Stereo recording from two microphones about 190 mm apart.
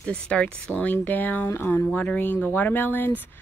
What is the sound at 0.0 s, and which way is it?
Speech, 5° left (ahead or behind).